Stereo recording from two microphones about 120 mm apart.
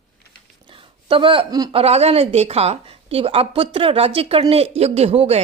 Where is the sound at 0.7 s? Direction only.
45° right (ahead or behind).